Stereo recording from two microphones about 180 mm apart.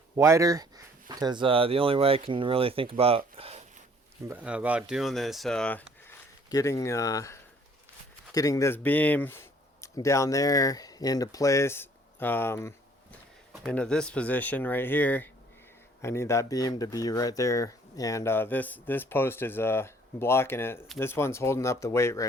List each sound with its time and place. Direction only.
0.2 s speech: 15° right (ahead or behind); by 3.6 s 30° right (ahead or behind)
4.3 s speech: 5° right (ahead or behind)
6.5 s speech: 20° left (ahead or behind)
13.5 s speech: 5° left (ahead or behind)